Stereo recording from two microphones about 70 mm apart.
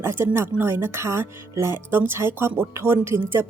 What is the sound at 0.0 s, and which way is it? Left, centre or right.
A woman's voice, right.